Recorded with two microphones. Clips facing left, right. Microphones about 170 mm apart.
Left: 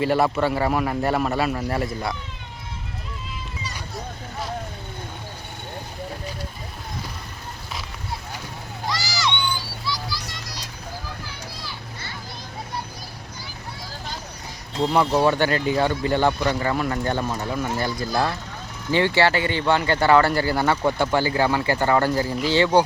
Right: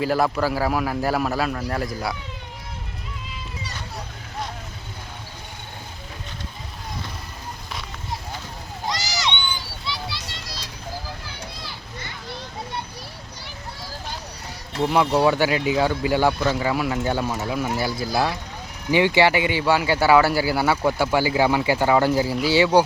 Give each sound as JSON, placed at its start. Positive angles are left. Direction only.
{"t": 0.0, "sound": "speech", "side_deg": 0}
{"t": 8.9, "sound": "a sound", "side_deg": -20}
{"t": 14.8, "sound": "speech", "side_deg": -5}